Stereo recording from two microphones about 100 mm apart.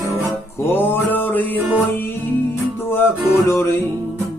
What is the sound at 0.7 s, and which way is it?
Music, 20° left (ahead or behind).